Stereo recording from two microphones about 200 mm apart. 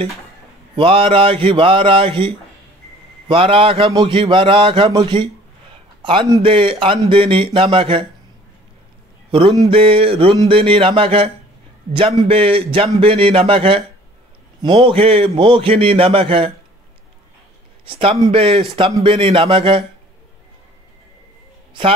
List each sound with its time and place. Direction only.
0.7 s a man's voice: 25° right (ahead or behind)
9.3 s a sound: 25° right (ahead or behind)
9.7 s a man's voice: 25° right (ahead or behind)
17.8 s a man's voice: 30° right (ahead or behind)